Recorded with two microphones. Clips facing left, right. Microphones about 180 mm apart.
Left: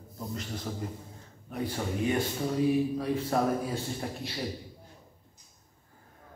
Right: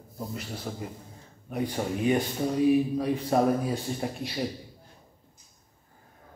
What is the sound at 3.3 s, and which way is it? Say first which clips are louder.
Speech: right 5 dB; 20° right (ahead or behind).